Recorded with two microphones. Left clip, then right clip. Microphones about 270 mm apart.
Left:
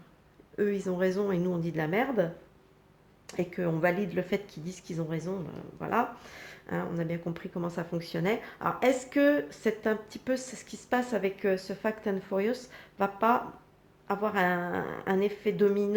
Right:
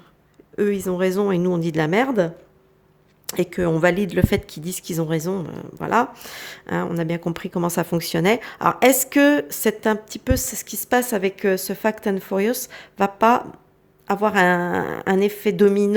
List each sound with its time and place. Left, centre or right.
0.5 s speech: right